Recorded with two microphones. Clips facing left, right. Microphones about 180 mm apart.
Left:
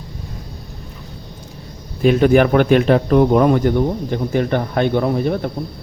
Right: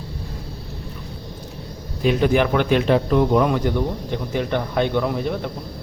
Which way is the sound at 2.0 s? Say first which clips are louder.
Left 5 dB; 50° left (ahead or behind).